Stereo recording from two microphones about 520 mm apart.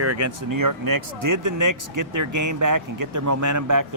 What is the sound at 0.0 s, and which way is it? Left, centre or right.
Speech, right.